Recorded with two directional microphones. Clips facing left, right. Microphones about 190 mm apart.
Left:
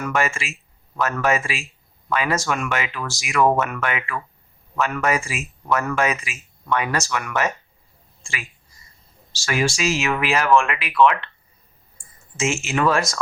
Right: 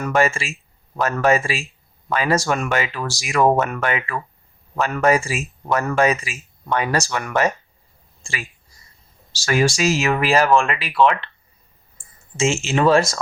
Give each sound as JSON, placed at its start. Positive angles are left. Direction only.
{"t": 0.0, "sound": "speech", "side_deg": -35}
{"t": 12.4, "sound": "speech", "side_deg": -30}